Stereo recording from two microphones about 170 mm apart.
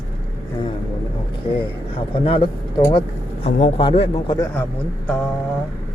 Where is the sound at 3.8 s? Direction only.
30° left (ahead or behind).